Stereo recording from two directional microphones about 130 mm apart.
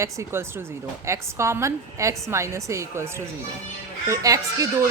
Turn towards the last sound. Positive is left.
turn(degrees=-25)  # may be behind; listen again after turning